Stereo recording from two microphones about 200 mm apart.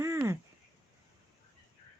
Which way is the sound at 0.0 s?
15° right (ahead or behind).